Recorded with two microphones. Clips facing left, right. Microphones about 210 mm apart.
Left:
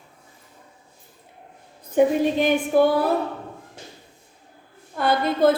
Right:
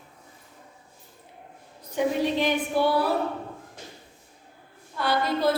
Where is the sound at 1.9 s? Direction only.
50° left (ahead or behind).